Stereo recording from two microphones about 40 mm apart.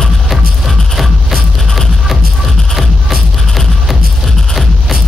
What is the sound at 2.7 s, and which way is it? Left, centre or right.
Music, centre.